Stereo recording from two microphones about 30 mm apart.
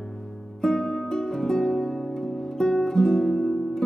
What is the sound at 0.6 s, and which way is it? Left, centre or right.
Music, left.